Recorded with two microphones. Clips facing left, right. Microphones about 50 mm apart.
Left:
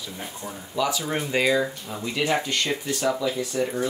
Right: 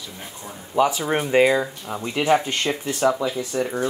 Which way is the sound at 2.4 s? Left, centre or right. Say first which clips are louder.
Right 2 dB; right.